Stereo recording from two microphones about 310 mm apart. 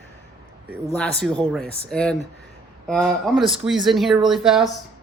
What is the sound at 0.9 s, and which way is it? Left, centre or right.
Speech, centre.